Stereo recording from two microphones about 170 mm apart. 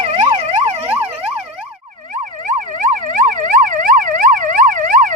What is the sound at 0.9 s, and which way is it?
Emergency vehicle, 10° right (ahead or behind).